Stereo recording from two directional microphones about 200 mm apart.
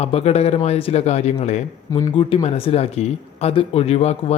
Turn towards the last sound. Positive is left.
turn(degrees=30)  # may be behind; listen again after turning